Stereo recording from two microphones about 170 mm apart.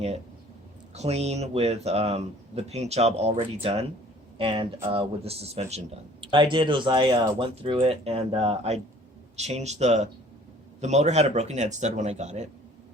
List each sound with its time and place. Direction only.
0.9 s speech: 40° right (ahead or behind)
6.2 s speech: 30° right (ahead or behind)